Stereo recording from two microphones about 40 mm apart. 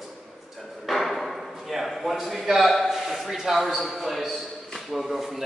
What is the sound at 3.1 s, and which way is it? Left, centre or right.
A man's voice, centre.